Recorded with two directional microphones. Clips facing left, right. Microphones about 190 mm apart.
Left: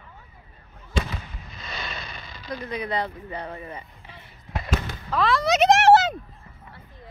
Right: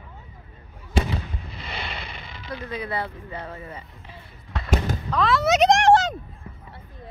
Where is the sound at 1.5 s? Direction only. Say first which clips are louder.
Even; 30° right (ahead or behind).